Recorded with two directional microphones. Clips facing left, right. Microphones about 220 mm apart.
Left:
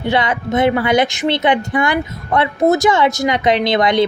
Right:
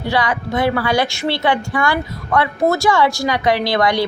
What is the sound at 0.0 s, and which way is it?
A woman's voice, 20° left (ahead or behind).